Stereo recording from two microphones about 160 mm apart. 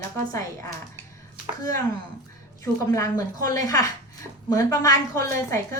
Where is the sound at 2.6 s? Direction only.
20° left (ahead or behind).